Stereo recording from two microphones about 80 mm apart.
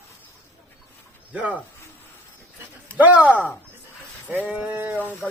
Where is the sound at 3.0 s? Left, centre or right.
Centre.